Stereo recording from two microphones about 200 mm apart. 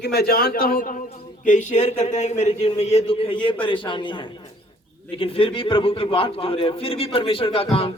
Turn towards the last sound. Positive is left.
turn(degrees=30)  # may be behind; listen again after turning